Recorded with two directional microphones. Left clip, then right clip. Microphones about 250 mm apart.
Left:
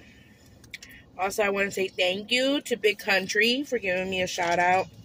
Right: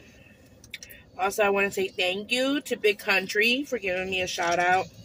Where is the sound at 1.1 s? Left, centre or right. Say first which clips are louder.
Right 2 dB; centre.